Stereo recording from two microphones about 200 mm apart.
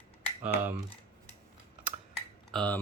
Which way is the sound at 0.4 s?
5° right (ahead or behind).